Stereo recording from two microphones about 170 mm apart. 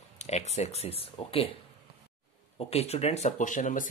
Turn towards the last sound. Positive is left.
turn(degrees=50)  # may be behind; listen again after turning